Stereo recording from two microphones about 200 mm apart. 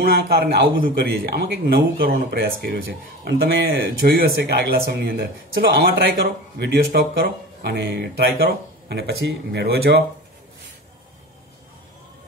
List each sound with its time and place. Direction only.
0.0 s a man's voice: 50° right (ahead or behind)